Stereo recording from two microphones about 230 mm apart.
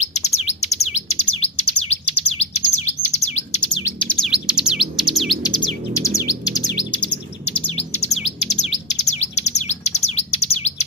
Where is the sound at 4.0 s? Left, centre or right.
Centre.